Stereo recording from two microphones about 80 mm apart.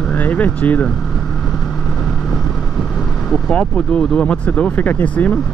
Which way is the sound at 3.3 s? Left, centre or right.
Centre.